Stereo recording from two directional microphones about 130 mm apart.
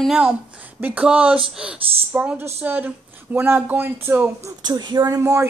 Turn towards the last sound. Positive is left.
turn(degrees=-20)  # may be behind; listen again after turning